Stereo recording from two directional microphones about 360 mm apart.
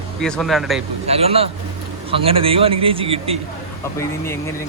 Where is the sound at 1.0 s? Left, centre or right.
Centre.